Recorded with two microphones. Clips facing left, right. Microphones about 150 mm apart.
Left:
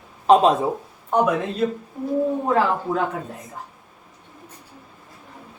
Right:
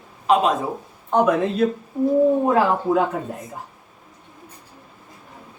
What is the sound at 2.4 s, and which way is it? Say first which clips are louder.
Speech: right 2 dB; 10° right (ahead or behind).